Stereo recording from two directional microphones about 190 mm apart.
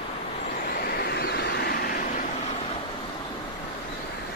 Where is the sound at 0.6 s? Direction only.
50° left (ahead or behind).